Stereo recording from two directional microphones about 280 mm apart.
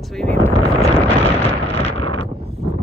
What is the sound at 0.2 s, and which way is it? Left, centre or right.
Speech, centre.